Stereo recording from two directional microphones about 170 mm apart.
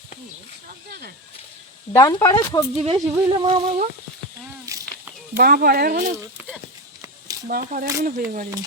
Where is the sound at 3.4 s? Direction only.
40° right (ahead or behind).